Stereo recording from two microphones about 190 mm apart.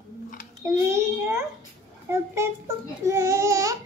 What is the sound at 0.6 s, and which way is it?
Child singing, 15° right (ahead or behind).